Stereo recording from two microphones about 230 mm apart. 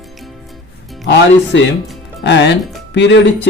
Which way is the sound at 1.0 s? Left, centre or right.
Left.